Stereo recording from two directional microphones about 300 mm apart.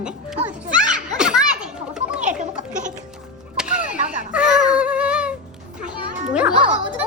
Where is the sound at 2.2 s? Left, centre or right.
Right.